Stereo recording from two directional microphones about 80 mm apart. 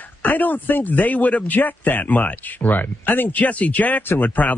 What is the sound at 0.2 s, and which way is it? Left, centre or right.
Speech, left.